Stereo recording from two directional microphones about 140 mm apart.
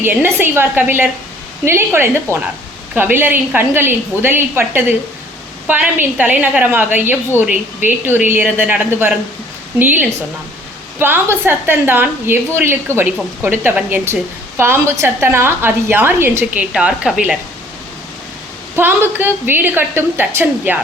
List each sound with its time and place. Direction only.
0.0 s a woman's voice: 15° right (ahead or behind)
18.8 s a woman's voice: 15° right (ahead or behind)